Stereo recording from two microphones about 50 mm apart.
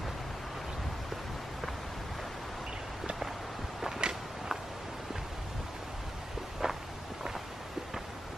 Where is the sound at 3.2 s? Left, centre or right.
Centre.